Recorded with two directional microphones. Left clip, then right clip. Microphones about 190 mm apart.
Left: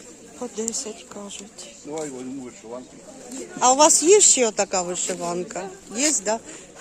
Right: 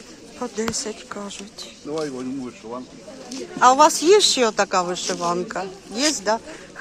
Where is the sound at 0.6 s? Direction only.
10° left (ahead or behind).